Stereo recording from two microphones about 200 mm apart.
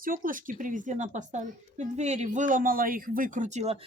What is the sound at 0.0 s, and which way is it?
Speech, 45° right (ahead or behind).